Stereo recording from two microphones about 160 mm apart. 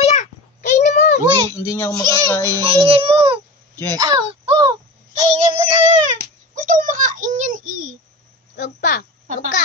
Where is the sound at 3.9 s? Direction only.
25° right (ahead or behind).